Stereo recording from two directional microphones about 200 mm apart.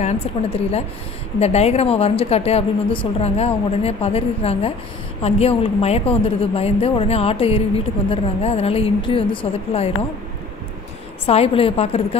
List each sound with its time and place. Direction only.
0.0 s a woman's voice: 30° left (ahead or behind)
11.2 s a woman's voice: 30° left (ahead or behind)